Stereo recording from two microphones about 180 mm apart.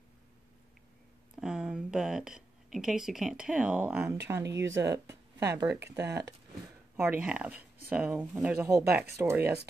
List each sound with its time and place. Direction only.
1.3 s speech: 5° right (ahead or behind)